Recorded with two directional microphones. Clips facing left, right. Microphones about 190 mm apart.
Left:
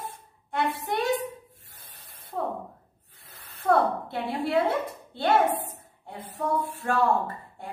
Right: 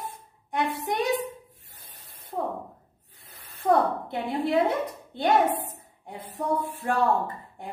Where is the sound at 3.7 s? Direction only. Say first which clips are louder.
Even; 15° right (ahead or behind).